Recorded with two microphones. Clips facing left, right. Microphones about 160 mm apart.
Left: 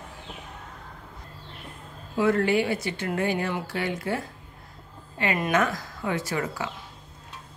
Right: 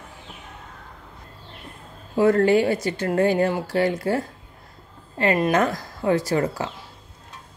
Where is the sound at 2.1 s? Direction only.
40° right (ahead or behind).